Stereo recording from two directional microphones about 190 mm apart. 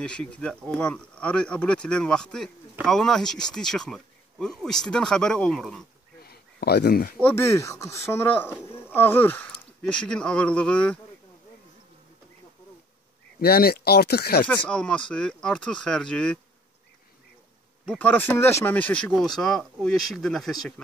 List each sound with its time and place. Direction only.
0.0 s speech: 5° left (ahead or behind)
6.2 s a sound: 55° left (ahead or behind)
7.2 s speech: 10° left (ahead or behind)
13.4 s speech: 55° left (ahead or behind)
14.5 s speech: 5° left (ahead or behind)
17.8 s speech: 10° left (ahead or behind)